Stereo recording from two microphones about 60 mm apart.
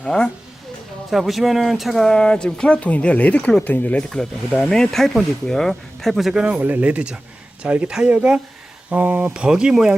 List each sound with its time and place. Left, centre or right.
1.1 s speech: centre; by 4.0 s left
4.1 s speech: centre
6.4 s speech: right
9.3 s speech: centre